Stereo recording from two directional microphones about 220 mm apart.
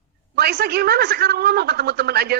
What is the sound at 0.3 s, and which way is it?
A woman's voice, 45° right (ahead or behind).